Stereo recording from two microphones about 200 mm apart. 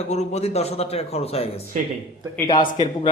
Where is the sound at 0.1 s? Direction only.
35° left (ahead or behind).